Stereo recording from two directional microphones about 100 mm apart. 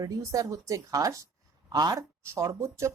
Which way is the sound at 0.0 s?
35° right (ahead or behind).